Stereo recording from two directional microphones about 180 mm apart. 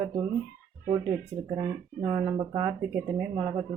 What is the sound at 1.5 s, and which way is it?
Speech, 20° right (ahead or behind).